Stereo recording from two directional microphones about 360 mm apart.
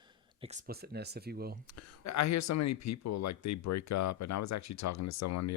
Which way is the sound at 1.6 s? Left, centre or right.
Left.